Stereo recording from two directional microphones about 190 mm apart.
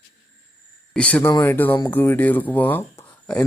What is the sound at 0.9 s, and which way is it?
Speech, 5° left (ahead or behind).